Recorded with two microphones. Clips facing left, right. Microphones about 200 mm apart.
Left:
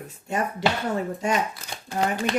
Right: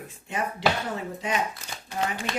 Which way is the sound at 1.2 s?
50° left (ahead or behind).